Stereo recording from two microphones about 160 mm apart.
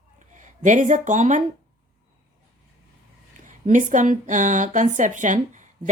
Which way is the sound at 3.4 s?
55° right (ahead or behind).